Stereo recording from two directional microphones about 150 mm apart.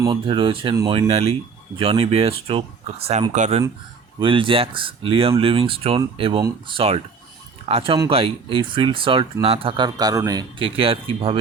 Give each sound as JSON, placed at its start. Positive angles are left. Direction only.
{"t": 0.1, "sound": "speech", "side_deg": -35}
{"t": 4.2, "sound": "speech", "side_deg": -35}
{"t": 10.6, "sound": "speech", "side_deg": -40}